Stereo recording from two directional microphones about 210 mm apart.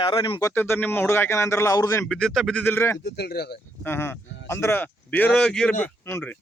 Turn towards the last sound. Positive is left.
turn(degrees=10)  # may be behind; listen again after turning